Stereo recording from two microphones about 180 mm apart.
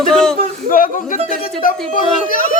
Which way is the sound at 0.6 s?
50° left (ahead or behind).